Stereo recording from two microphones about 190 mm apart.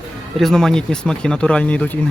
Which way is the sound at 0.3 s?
Centre (ahead or behind).